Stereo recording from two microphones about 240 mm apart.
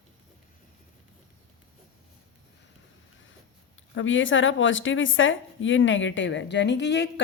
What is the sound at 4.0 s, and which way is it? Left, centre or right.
A woman's voice, left.